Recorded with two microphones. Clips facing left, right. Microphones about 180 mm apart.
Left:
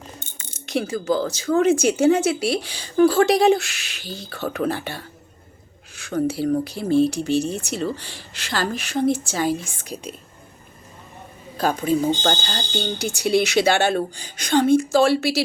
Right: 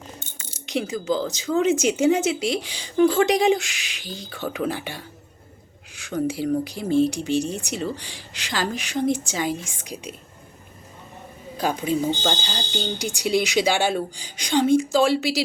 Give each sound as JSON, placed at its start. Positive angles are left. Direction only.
{"t": 0.6, "sound": "speech", "side_deg": -15}
{"t": 11.5, "sound": "speech", "side_deg": -15}